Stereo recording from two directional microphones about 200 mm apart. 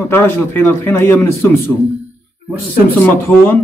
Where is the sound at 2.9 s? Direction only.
10° left (ahead or behind).